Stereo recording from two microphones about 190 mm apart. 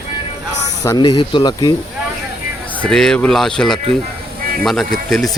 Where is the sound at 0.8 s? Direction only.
20° left (ahead or behind).